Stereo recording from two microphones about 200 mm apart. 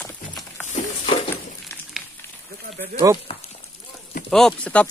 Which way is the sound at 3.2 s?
30° left (ahead or behind).